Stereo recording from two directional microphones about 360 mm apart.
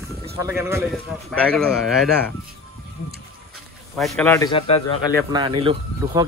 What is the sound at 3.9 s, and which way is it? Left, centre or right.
Speech, centre.